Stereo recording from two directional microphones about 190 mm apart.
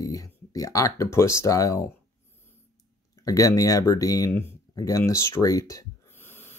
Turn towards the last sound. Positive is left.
turn(degrees=10)  # may be behind; listen again after turning